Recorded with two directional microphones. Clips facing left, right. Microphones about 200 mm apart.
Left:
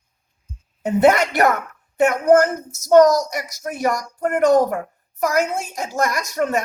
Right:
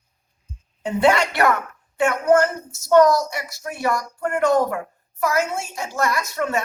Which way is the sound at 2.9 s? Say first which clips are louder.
Left 2 dB; 40° left (ahead or behind).